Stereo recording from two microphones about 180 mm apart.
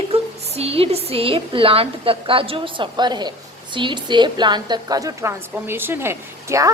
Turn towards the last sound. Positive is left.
turn(degrees=-15)  # may be behind; listen again after turning